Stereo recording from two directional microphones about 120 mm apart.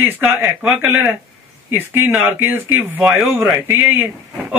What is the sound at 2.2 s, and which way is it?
Speech, 20° right (ahead or behind).